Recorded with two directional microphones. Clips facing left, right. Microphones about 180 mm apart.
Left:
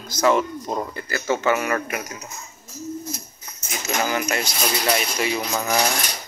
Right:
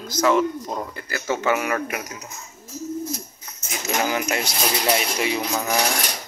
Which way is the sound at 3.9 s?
10° right (ahead or behind).